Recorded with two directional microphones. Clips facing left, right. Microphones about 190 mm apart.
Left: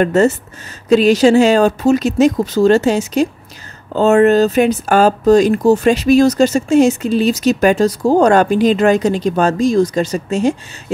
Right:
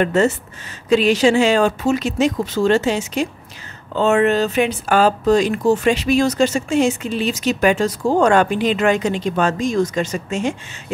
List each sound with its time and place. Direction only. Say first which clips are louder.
0.0 s speech: left 4 dB; 40° left (ahead or behind)